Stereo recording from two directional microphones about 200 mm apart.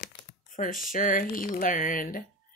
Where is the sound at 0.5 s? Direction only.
45° left (ahead or behind).